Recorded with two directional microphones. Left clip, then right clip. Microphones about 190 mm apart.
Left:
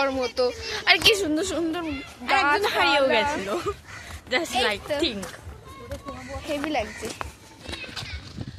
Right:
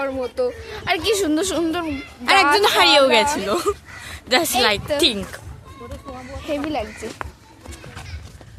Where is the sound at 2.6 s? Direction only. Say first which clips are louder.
Right 7 dB; 70° right (ahead or behind).